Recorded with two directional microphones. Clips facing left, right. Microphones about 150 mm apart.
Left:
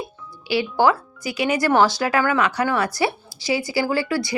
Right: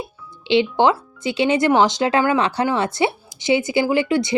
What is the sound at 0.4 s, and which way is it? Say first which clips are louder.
A woman's voice: right 3 dB; 25° right (ahead or behind).